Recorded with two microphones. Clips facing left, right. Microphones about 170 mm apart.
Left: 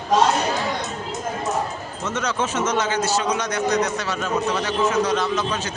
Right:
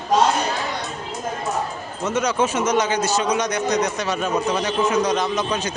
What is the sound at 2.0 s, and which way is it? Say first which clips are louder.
A man's voice: right 4 dB; 10° right (ahead or behind).